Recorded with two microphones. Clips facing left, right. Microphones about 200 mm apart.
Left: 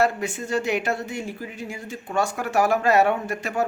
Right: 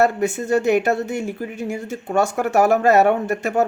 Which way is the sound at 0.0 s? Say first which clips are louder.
Right 5 dB; 45° right (ahead or behind).